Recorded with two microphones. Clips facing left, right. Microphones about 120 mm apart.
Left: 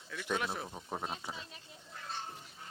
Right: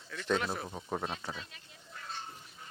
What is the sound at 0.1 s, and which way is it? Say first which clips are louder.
Speech: right 3 dB; 10° left (ahead or behind).